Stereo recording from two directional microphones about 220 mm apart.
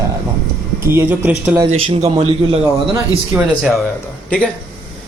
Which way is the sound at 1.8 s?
25° right (ahead or behind).